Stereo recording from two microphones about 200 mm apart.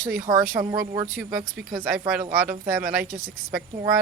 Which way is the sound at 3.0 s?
45° right (ahead or behind).